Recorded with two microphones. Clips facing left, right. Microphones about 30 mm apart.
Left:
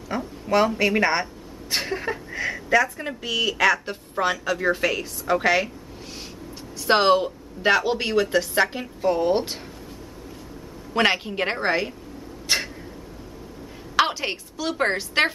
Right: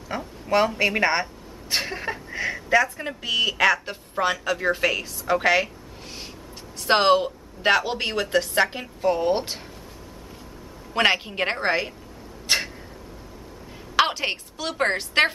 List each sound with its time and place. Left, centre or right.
0.1 s a woman's voice: centre
6.9 s speech: centre
10.9 s a woman's voice: centre
12.5 s a sound: centre
13.9 s a woman's voice: centre